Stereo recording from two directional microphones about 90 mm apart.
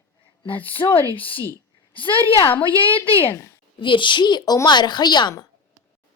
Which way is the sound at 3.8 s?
65° left (ahead or behind).